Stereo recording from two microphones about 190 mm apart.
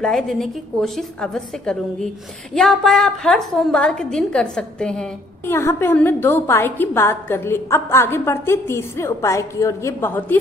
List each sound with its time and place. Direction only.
0.0 s a woman's voice: centre (ahead or behind)